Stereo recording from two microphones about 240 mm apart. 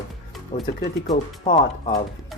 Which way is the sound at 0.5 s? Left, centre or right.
Left.